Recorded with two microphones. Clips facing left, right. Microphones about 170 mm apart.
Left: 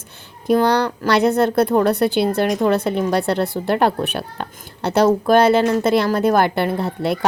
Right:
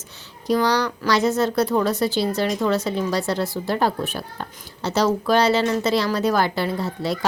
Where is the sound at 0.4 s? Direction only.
55° left (ahead or behind).